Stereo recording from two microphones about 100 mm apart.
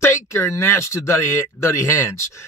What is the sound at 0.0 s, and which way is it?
Speech, 30° left (ahead or behind).